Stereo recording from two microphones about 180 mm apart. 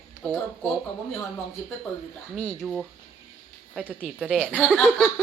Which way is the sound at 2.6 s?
Centre (ahead or behind).